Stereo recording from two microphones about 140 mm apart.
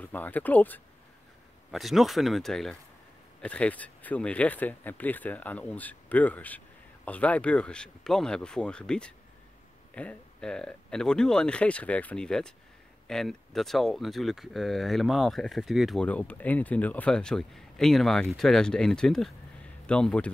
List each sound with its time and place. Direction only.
0.0 s speech: 10° left (ahead or behind)
1.7 s speech: centre (ahead or behind)
16.1 s speech: 10° left (ahead or behind)